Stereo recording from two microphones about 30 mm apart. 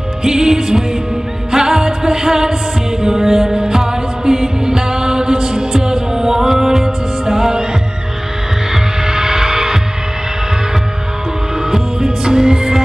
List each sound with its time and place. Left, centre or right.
0.2 s music: right
8.7 s hum: centre
11.7 s music: centre